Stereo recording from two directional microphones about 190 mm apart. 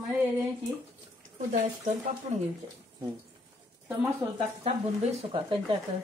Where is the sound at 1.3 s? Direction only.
35° right (ahead or behind).